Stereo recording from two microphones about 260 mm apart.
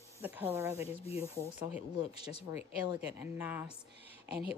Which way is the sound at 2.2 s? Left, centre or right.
Left.